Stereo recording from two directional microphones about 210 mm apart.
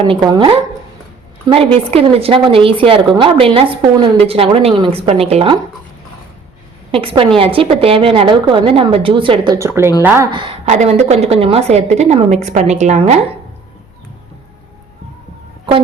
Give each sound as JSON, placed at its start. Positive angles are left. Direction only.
{"t": 0.1, "sound": "a woman's voice", "side_deg": -20}
{"t": 6.9, "sound": "a woman's voice", "side_deg": -25}
{"t": 10.7, "sound": "a woman's voice", "side_deg": -35}